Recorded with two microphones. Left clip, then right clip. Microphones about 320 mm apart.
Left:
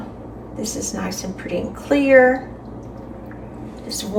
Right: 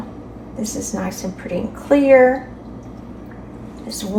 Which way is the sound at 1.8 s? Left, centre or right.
Centre.